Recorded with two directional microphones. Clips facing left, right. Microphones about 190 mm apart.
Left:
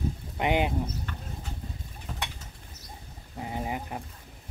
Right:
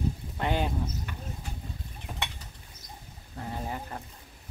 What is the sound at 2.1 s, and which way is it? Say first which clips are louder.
Mechanisms: even; 15° right (ahead or behind).